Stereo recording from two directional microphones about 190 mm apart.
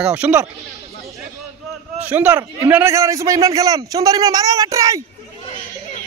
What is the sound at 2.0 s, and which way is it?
A man's voice, 5° right (ahead or behind).